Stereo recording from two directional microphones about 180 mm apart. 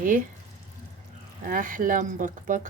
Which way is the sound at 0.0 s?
50° right (ahead or behind).